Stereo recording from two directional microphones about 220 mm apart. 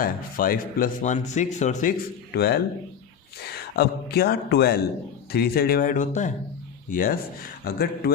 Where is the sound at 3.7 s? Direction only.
45° left (ahead or behind).